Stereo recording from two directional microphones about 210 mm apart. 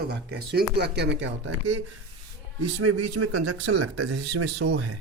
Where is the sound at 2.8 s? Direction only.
90° right; by 4.9 s 55° right (ahead or behind).